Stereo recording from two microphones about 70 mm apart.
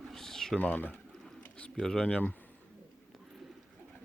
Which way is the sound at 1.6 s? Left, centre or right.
Centre.